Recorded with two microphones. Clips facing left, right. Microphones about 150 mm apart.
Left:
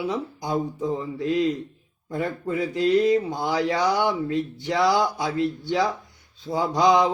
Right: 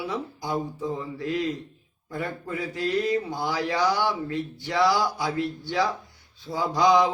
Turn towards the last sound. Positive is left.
turn(degrees=20)  # may be behind; listen again after turning